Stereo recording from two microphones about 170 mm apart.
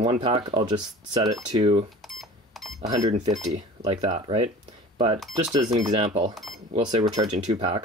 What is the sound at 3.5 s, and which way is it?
Speech, 30° right (ahead or behind).